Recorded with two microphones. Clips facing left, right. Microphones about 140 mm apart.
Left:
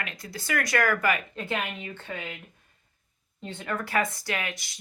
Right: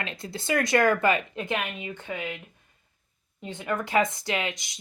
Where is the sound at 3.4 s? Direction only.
15° right (ahead or behind).